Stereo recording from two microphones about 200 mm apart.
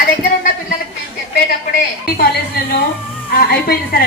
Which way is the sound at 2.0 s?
50° left (ahead or behind).